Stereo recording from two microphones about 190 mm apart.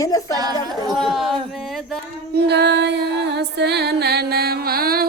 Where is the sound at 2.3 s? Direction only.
65° right (ahead or behind).